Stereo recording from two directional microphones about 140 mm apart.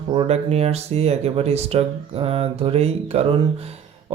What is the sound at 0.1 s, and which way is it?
A man's voice, 45° right (ahead or behind).